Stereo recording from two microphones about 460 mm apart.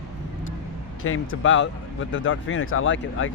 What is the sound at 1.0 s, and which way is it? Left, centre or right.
Speech, left.